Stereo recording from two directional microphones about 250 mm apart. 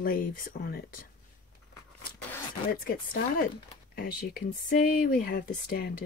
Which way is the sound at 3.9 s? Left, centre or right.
Left.